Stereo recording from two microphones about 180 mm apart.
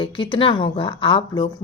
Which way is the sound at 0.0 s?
30° left (ahead or behind).